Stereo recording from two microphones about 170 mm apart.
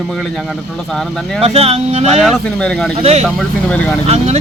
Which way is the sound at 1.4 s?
35° right (ahead or behind).